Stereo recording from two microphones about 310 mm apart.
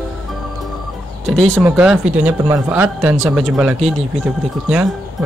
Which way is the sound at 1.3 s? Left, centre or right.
Centre.